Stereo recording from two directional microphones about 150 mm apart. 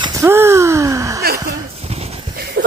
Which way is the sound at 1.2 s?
90° right.